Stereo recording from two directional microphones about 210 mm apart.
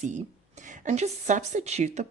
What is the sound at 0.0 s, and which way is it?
Speech, 35° right (ahead or behind).